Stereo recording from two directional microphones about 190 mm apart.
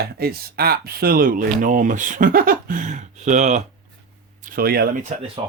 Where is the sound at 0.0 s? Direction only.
55° right (ahead or behind); by 3.6 s 40° right (ahead or behind).